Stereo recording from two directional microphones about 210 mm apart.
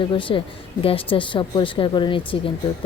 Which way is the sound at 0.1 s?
25° left (ahead or behind).